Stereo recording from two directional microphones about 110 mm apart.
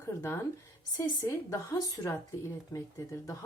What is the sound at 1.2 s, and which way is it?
Speech, 25° left (ahead or behind).